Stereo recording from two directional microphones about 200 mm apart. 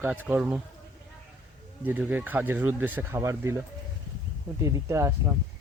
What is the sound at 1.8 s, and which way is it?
Speech, 10° right (ahead or behind).